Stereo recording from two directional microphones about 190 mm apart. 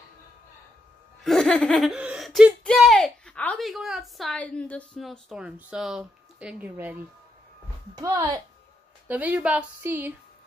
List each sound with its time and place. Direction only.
1.2 s speech: centre (ahead or behind)
7.9 s speech: 20° right (ahead or behind)
9.0 s speech: 10° right (ahead or behind)